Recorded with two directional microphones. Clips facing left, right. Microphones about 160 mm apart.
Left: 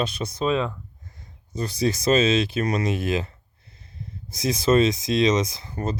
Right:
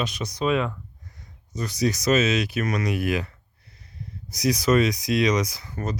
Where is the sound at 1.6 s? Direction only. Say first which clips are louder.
Left 1 dB; 30° left (ahead or behind).